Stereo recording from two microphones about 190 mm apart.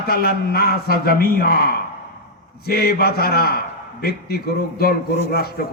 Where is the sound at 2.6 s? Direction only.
55° left (ahead or behind).